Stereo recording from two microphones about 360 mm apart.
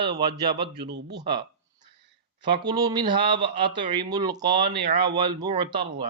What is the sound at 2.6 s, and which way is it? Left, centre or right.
Speech, centre.